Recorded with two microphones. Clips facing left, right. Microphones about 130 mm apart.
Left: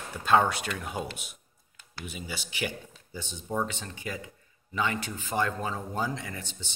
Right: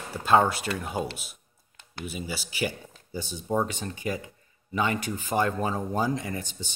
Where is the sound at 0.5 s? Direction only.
35° right (ahead or behind).